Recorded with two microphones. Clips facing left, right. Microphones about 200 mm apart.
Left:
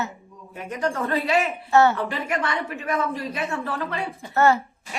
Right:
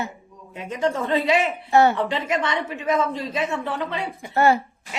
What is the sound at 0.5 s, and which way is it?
Speech, 20° right (ahead or behind).